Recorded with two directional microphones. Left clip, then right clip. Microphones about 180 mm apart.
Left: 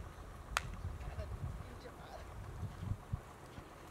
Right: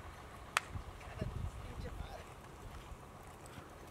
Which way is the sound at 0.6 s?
Centre (ahead or behind).